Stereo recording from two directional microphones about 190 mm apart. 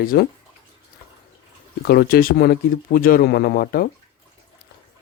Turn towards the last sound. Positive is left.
turn(degrees=50)  # may be behind; listen again after turning